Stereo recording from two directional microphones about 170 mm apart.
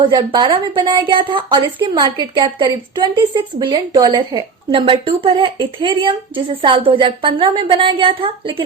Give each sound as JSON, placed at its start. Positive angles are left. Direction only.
{"t": 0.1, "sound": "a woman's voice", "side_deg": -25}